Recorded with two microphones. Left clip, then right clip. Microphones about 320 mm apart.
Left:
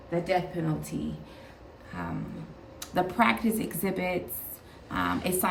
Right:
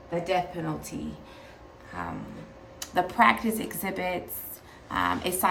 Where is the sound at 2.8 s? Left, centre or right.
Centre.